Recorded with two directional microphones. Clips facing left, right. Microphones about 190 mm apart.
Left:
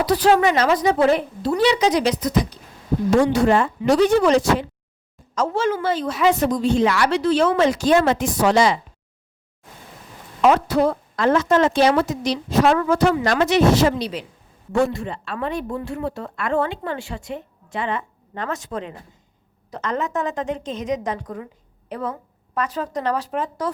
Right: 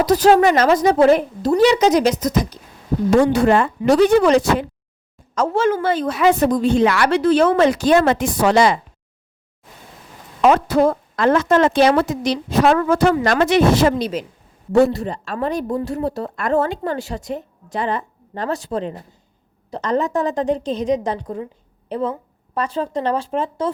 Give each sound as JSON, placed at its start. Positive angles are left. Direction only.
{"t": 0.0, "sound": "a woman's voice", "side_deg": -45}
{"t": 3.2, "sound": "a woman's voice", "side_deg": -60}
{"t": 10.4, "sound": "a woman's voice", "side_deg": -50}